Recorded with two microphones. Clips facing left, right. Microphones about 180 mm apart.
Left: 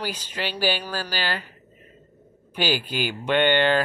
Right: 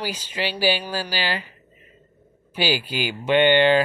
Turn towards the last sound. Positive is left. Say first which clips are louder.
# right 4 dB
turn(degrees=-10)  # may be behind; listen again after turning